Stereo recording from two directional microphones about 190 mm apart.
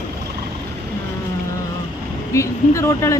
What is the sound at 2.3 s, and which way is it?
Speech, 15° left (ahead or behind).